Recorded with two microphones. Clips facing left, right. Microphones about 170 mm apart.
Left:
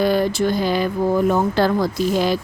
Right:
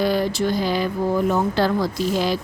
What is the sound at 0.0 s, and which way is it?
A woman's voice, 50° left (ahead or behind).